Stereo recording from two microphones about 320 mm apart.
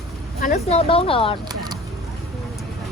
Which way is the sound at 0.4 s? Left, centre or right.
Left.